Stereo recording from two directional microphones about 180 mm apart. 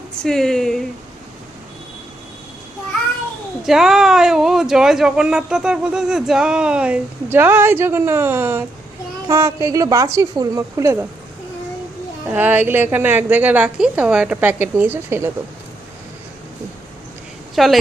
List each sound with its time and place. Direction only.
0.2 s speech: 5° left (ahead or behind)
3.6 s a woman's voice: centre (ahead or behind)
12.3 s a woman's voice: 10° right (ahead or behind)
17.5 s a woman's voice: centre (ahead or behind)